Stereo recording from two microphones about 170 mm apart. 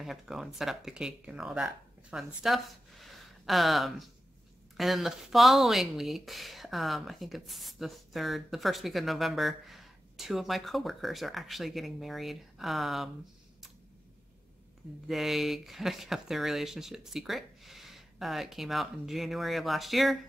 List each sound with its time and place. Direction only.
0.0 s speech: centre (ahead or behind)
15.0 s speech: centre (ahead or behind)